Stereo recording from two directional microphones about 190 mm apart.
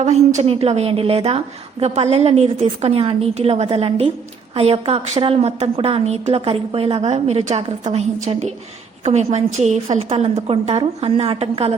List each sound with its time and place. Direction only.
0.0 s a woman's voice: 40° right (ahead or behind)